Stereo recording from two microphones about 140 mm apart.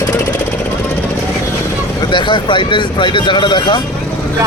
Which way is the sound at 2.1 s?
35° left (ahead or behind).